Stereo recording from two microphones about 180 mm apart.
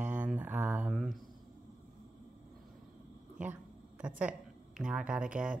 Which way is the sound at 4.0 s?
5° right (ahead or behind).